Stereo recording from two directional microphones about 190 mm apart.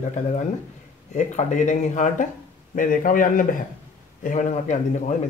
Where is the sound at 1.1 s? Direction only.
40° left (ahead or behind).